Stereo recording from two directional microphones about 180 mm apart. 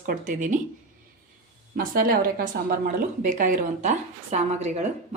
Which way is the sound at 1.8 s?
55° right (ahead or behind).